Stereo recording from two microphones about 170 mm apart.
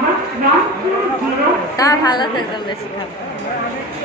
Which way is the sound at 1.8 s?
20° left (ahead or behind).